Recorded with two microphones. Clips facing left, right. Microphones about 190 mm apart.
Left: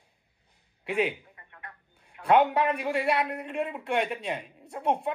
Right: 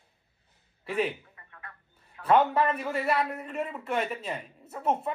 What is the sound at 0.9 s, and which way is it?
Telephone, 15° left (ahead or behind).